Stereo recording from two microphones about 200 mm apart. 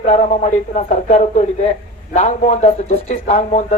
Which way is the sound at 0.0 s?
35° left (ahead or behind).